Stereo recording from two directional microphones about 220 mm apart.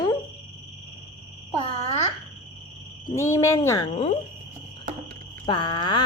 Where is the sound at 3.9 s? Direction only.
30° left (ahead or behind).